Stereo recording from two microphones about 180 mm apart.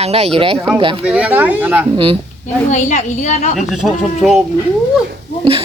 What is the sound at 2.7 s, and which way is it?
Speech, 40° left (ahead or behind).